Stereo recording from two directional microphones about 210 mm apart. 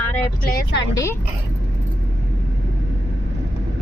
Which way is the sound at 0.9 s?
15° left (ahead or behind).